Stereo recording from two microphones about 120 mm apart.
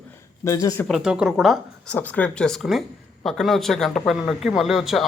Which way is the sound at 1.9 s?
15° left (ahead or behind).